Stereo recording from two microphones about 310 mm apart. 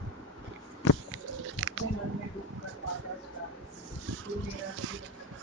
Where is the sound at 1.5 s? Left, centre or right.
Right.